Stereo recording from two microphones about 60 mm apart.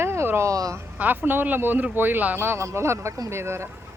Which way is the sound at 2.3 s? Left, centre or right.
Right.